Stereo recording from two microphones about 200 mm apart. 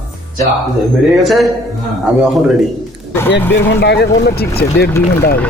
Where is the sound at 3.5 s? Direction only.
55° left (ahead or behind).